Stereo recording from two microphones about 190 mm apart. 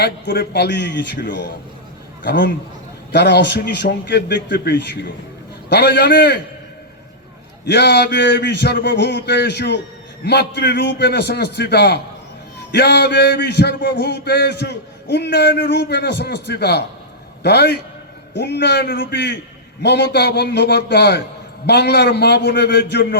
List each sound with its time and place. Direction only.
0.0 s a man's voice: 60° left (ahead or behind)
7.6 s a man's voice: 65° left (ahead or behind)